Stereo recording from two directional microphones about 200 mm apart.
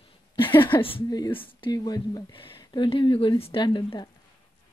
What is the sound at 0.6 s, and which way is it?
A woman's voice, 25° left (ahead or behind).